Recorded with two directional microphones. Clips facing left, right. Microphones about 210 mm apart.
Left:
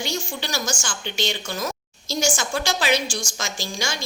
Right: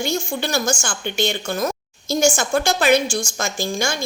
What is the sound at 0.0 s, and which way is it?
A woman's voice, 50° right (ahead or behind).